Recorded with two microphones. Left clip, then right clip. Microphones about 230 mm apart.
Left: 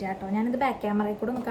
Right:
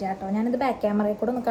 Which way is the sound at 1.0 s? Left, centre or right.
Right.